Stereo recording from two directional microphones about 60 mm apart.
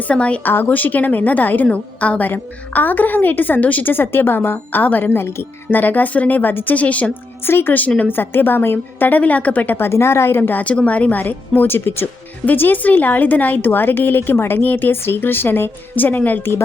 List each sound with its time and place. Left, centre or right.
0.1 s a woman's voice: left
0.4 s a woman's voice: left
7.4 s a woman's voice: left
9.7 s a woman's voice: left
10.6 s a woman's voice: left